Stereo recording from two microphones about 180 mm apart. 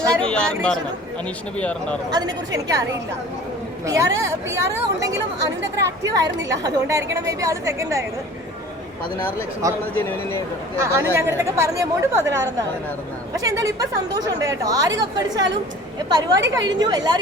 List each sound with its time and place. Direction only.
0.1 s speech: 5° left (ahead or behind)
2.0 s a woman's voice: 20° right (ahead or behind)
3.8 s speech: 15° right (ahead or behind)
6.6 s speech: 20° right (ahead or behind)
10.8 s a woman's voice: 15° right (ahead or behind)